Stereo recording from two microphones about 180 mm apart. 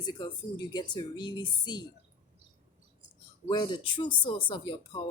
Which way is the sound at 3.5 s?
25° left (ahead or behind).